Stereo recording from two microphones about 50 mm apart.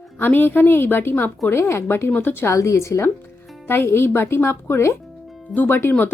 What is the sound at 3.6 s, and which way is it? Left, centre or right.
Speech, left.